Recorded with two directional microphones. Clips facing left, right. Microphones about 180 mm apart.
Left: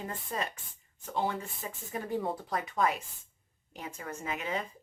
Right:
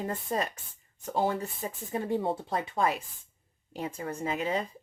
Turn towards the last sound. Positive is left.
turn(degrees=-30)  # may be behind; listen again after turning